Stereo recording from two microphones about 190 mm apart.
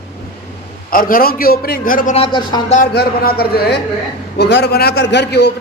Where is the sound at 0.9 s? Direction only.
45° left (ahead or behind).